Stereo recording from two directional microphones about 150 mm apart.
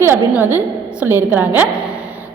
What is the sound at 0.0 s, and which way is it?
A woman's voice, 15° right (ahead or behind).